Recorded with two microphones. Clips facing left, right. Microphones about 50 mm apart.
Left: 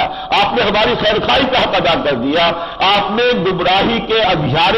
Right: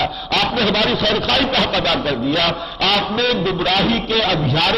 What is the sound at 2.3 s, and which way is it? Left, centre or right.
Speech, left.